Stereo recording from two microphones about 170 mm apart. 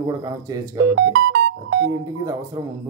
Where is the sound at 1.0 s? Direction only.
90° right.